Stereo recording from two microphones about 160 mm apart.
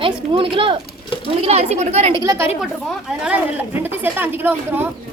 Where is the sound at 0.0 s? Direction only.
35° right (ahead or behind).